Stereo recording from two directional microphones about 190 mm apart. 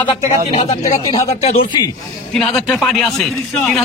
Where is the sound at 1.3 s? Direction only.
35° left (ahead or behind).